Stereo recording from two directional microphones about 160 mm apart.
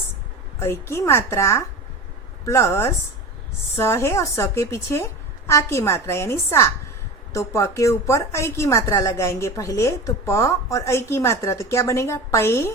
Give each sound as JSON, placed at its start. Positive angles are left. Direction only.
{"t": 0.6, "sound": "a woman's voice", "side_deg": 15}